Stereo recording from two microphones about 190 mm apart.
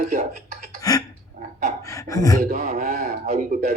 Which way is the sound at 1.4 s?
40° right (ahead or behind).